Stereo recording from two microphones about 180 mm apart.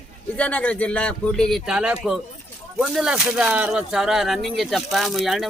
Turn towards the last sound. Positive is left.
turn(degrees=0)  # may be behind; listen again after turning